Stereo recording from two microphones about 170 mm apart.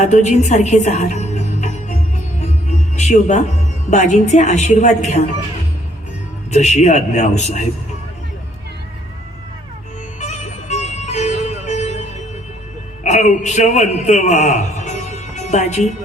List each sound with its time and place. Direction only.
0.0 s a woman's voice: 45° left (ahead or behind)
2.4 s music: 45° left (ahead or behind)
3.8 s a woman's voice: 45° left (ahead or behind)
6.5 s a man's voice: 40° left (ahead or behind)
10.2 s music: 40° left (ahead or behind)
13.1 s a man's voice: 45° left (ahead or behind)